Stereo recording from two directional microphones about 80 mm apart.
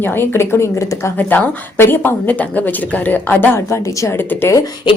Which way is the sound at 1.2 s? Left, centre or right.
Left.